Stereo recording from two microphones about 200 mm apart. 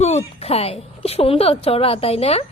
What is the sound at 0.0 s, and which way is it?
A woman's voice, 30° left (ahead or behind).